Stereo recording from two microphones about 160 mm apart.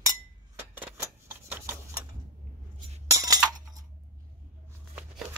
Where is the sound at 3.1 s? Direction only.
20° right (ahead or behind).